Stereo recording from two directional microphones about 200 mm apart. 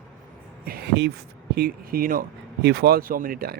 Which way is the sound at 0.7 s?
55° right (ahead or behind).